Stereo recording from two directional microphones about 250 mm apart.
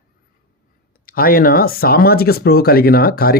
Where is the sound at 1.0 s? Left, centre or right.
Left.